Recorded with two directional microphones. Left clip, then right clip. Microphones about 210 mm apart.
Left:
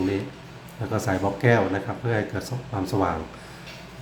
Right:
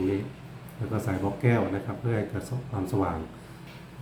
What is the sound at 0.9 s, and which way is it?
Speech, 15° left (ahead or behind).